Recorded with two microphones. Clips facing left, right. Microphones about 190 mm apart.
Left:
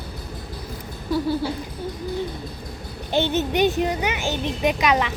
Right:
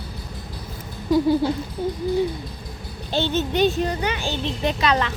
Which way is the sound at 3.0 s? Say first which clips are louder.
Left 1 dB; 15° left (ahead or behind).